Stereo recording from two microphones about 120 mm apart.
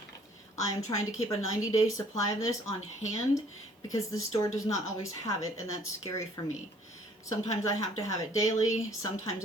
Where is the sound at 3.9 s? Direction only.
25° left (ahead or behind).